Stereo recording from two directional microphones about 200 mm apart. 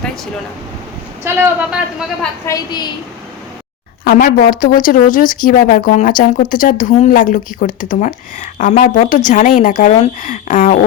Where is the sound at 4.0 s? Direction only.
45° left (ahead or behind).